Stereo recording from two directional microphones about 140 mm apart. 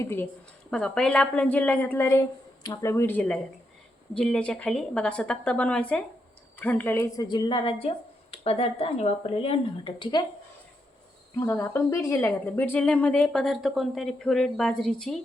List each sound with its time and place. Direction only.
0.0 s speech: 15° left (ahead or behind)
0.7 s speech: 5° left (ahead or behind)
7.0 s speech: 25° left (ahead or behind)
11.3 s speech: 20° left (ahead or behind); by 15.2 s 5° left (ahead or behind)